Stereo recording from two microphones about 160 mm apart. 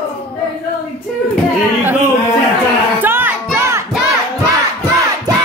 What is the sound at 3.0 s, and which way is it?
Music, 10° right (ahead or behind).